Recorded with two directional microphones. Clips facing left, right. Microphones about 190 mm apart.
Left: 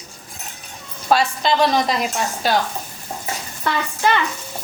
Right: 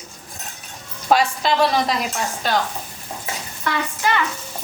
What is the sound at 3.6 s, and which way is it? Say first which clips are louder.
Speech: left 2 dB; 25° left (ahead or behind).